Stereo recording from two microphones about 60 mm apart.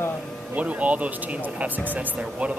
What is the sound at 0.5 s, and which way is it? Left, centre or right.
Speech, right.